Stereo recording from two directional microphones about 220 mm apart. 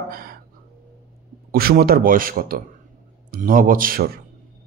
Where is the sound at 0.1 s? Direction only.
40° right (ahead or behind).